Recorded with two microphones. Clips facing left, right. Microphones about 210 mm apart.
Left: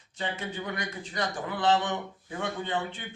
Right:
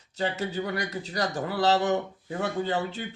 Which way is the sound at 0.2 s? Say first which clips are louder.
Right 5 dB; 40° right (ahead or behind).